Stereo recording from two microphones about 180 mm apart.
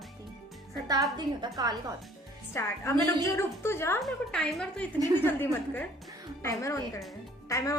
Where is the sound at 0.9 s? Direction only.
25° right (ahead or behind).